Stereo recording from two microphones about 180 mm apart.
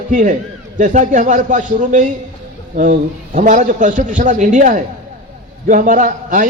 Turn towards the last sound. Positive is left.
turn(degrees=-45)  # may be behind; listen again after turning